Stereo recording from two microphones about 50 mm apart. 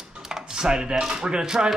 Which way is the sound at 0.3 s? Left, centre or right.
Centre.